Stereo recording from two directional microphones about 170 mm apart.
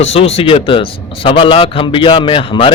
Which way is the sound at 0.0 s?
35° left (ahead or behind).